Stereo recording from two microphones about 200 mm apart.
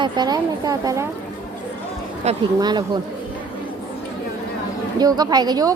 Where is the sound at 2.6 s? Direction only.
20° right (ahead or behind).